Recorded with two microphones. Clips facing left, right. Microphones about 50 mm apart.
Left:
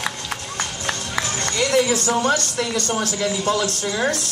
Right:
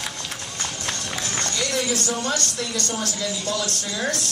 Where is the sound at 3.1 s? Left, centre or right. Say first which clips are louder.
Left 6 dB; left.